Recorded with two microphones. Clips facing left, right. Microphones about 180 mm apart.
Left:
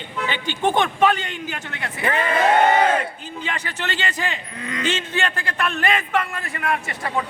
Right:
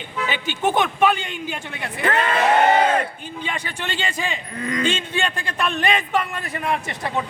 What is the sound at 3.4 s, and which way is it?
A man's voice, 15° right (ahead or behind).